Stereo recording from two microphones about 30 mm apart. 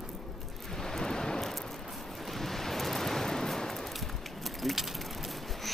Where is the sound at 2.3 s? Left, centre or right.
Centre.